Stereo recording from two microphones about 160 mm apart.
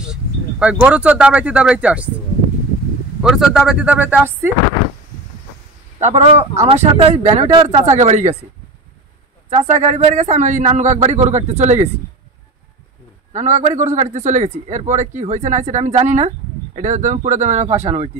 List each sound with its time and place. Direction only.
0.0 s speech: 5° right (ahead or behind)
3.2 s speech: 5° right (ahead or behind)
5.9 s a man's voice: 45° right (ahead or behind)
9.5 s a man's voice: 45° right (ahead or behind)
13.3 s a man's voice: 45° right (ahead or behind)